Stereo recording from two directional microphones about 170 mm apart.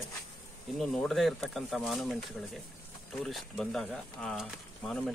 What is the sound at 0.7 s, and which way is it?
Speech, centre (ahead or behind).